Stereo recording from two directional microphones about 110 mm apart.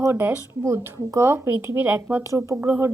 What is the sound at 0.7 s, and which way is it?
Speech, 25° right (ahead or behind).